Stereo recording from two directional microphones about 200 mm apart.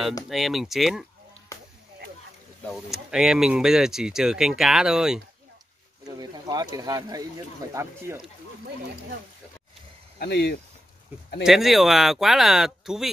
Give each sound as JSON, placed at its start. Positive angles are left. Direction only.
{"t": 0.3, "sound": "speech", "side_deg": 0}
{"t": 1.5, "sound": "a sound", "side_deg": 15}
{"t": 2.7, "sound": "speech", "side_deg": 0}
{"t": 6.0, "sound": "speech", "side_deg": -20}
{"t": 10.1, "sound": "speech", "side_deg": 55}
{"t": 11.4, "sound": "speech", "side_deg": 0}